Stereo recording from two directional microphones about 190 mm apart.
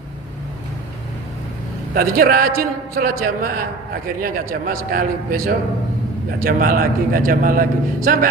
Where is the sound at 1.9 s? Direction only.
50° right (ahead or behind).